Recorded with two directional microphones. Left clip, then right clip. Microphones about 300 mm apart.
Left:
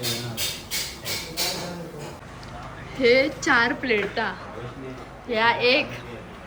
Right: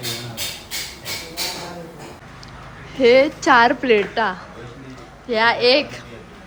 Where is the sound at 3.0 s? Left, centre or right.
Centre.